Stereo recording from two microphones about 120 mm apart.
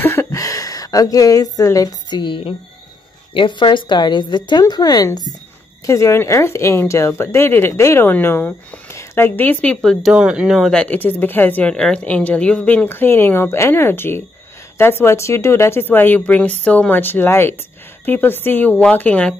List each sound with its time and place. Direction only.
0.0 s a woman's voice: 20° left (ahead or behind)
5.9 s speech: 25° left (ahead or behind); by 10.1 s 5° left (ahead or behind)
10.1 s speech: 5° right (ahead or behind); by 19.3 s 10° left (ahead or behind)